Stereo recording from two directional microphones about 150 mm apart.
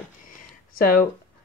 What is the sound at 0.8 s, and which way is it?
Speech, 70° left (ahead or behind).